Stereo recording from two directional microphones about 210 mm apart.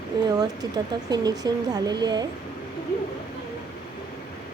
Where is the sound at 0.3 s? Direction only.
20° right (ahead or behind).